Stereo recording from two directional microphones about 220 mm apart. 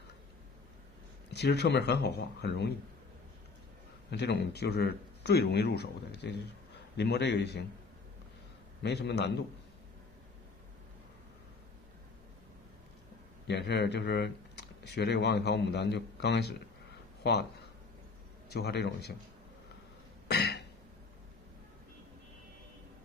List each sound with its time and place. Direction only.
1.3 s speech: 50° left (ahead or behind)
4.1 s speech: 50° left (ahead or behind)
8.8 s speech: 50° left (ahead or behind)
13.5 s speech: 50° left (ahead or behind)
18.4 s speech: 50° left (ahead or behind)
20.2 s a sound: 50° left (ahead or behind)